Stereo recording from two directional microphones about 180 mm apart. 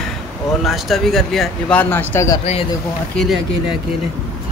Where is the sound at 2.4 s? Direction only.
35° left (ahead or behind).